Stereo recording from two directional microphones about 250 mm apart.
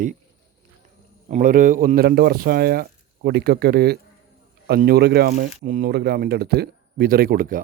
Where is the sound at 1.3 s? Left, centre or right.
Right.